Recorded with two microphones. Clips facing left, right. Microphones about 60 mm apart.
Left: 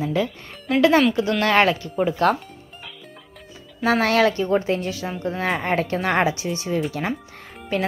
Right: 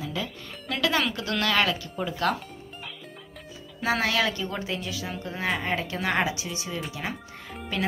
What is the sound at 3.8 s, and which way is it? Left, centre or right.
Speech, left.